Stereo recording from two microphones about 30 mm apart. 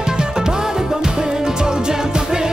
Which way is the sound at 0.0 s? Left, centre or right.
Right.